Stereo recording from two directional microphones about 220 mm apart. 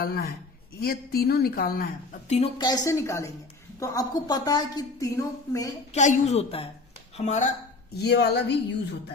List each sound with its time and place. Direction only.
0.0 s a woman's voice: 45° left (ahead or behind)
2.3 s a woman's voice: 25° left (ahead or behind)
5.9 s a woman's voice: 30° left (ahead or behind)
7.9 s a woman's voice: 45° left (ahead or behind)